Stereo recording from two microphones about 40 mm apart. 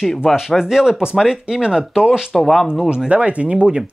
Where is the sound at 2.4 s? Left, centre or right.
Centre.